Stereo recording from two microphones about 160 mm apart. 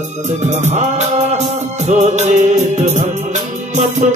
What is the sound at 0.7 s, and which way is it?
Music, 45° right (ahead or behind).